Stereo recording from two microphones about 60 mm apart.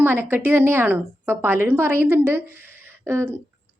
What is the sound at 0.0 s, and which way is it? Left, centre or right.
A woman's voice, right.